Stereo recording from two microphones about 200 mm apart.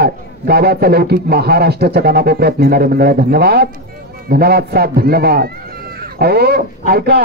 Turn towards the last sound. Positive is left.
turn(degrees=-50)  # may be behind; listen again after turning